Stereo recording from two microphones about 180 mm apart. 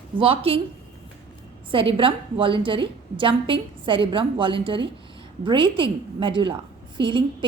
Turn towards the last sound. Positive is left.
turn(degrees=-25)  # may be behind; listen again after turning